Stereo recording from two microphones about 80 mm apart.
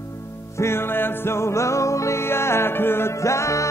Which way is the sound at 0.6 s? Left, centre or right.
Left.